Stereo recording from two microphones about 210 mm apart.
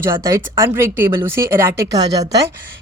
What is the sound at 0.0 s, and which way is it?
Speech, 15° right (ahead or behind).